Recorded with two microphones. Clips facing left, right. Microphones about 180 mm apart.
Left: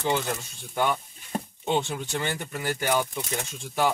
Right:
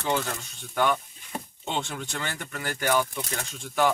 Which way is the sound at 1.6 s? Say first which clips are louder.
Left 5 dB; 15° left (ahead or behind).